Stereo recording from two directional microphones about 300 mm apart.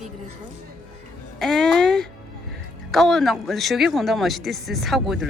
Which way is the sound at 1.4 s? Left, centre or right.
Centre.